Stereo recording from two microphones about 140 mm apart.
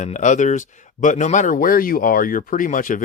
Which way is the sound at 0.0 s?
60° left (ahead or behind).